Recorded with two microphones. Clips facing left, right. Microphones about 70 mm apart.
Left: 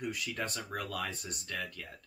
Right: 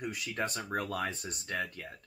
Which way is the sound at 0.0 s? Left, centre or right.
Right.